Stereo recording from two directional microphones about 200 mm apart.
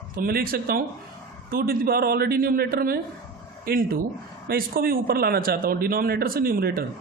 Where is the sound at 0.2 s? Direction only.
50° right (ahead or behind).